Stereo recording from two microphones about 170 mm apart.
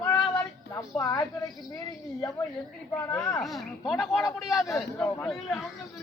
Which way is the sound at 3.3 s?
Centre (ahead or behind).